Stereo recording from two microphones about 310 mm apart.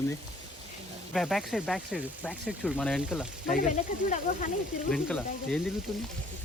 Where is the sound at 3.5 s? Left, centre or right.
Left.